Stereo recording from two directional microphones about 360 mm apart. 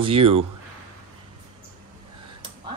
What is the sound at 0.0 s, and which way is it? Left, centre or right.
Speech, centre.